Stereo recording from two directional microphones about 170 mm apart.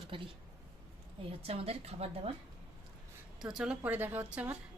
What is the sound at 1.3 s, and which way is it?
A woman's voice, 35° right (ahead or behind).